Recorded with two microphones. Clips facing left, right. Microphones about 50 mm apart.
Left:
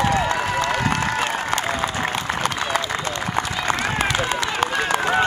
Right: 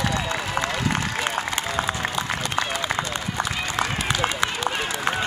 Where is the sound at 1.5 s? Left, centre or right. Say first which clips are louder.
Left 3 dB; left.